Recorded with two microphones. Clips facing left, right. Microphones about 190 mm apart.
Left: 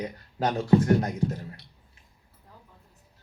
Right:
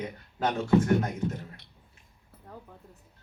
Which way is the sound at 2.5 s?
60° right (ahead or behind).